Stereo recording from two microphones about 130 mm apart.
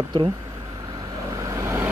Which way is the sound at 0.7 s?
30° right (ahead or behind).